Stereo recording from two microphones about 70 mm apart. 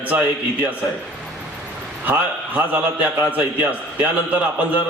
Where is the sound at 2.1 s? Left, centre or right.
Right.